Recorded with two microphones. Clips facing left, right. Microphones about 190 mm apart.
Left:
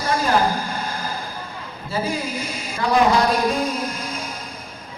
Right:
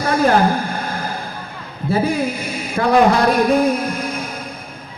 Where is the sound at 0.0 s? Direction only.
55° right (ahead or behind).